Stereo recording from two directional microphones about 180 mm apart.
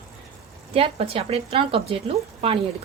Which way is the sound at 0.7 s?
30° right (ahead or behind).